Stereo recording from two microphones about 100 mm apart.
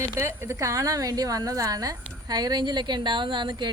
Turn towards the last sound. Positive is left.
turn(degrees=-50)  # may be behind; listen again after turning